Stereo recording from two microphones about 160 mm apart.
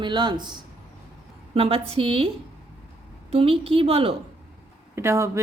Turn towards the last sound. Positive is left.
turn(degrees=-15)  # may be behind; listen again after turning